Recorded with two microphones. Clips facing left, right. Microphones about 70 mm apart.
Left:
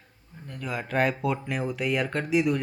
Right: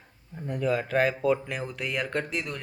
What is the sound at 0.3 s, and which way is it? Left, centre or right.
Speech, right.